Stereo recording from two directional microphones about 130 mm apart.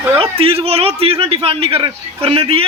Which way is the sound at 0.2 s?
45° right (ahead or behind).